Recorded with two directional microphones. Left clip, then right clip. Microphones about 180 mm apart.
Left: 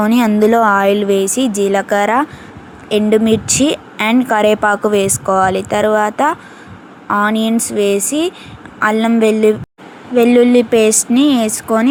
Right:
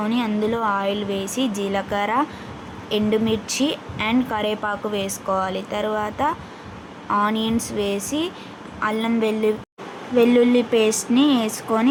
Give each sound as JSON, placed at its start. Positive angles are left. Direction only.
{"t": 0.0, "sound": "a woman's voice", "side_deg": 45}